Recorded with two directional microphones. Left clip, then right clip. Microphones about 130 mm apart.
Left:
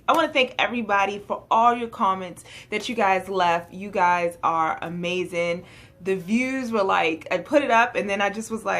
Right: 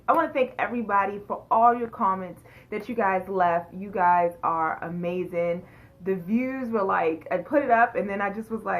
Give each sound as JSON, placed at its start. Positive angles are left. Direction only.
{"t": 0.0, "sound": "speech", "side_deg": 30}